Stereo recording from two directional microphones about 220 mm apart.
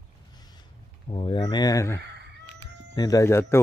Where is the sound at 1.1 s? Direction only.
20° left (ahead or behind).